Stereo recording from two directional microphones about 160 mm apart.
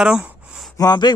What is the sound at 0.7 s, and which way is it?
Speech, 25° left (ahead or behind).